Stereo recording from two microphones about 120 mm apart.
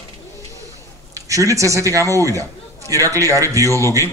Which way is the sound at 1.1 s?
25° right (ahead or behind).